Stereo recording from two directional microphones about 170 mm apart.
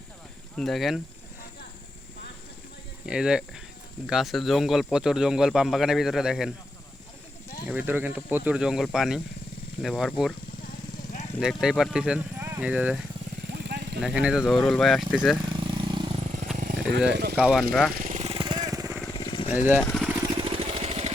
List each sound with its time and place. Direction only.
0.5 s speech: centre (ahead or behind)
3.1 s speech: 5° right (ahead or behind)
7.7 s speech: 10° right (ahead or behind)
11.3 s speech: 5° right (ahead or behind)
13.5 s vehicle: 80° right
14.0 s speech: 5° right (ahead or behind)
15.5 s vehicle: 30° right (ahead or behind)
17.1 s speech: 80° right
17.3 s speech: 5° right (ahead or behind)
17.9 s vehicle: 50° right (ahead or behind); by 18.9 s 20° right (ahead or behind)
19.0 s vehicle: 25° left (ahead or behind)
19.8 s vehicle: 5° left (ahead or behind)
20.3 s vehicle: 30° right (ahead or behind)